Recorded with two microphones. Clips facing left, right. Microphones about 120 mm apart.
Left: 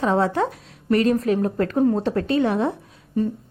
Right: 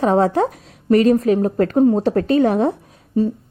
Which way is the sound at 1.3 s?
25° right (ahead or behind).